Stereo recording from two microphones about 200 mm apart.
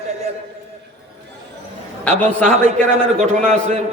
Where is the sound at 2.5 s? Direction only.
35° right (ahead or behind).